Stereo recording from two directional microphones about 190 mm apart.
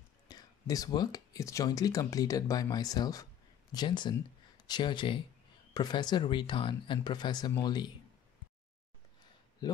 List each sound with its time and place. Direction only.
0.3 s speech: 20° left (ahead or behind)